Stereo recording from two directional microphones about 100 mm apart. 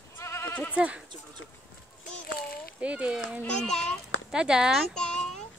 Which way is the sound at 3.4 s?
5° left (ahead or behind).